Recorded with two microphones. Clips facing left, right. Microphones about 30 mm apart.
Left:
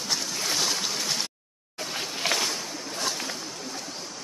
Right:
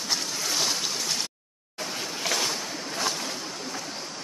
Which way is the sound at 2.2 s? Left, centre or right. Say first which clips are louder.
Left 2 dB; left.